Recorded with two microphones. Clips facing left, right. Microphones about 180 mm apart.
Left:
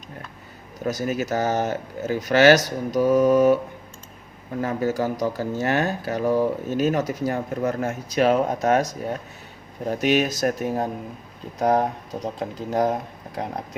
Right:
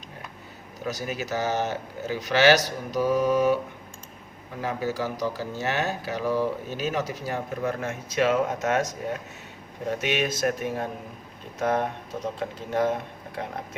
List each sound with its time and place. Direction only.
0.9 s speech: 45° left (ahead or behind)
4.6 s speech: 50° left (ahead or behind)